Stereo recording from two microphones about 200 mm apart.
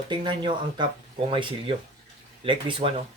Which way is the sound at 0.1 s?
25° right (ahead or behind).